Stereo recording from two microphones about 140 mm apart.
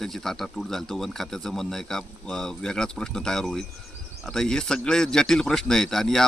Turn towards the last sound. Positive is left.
turn(degrees=5)  # may be behind; listen again after turning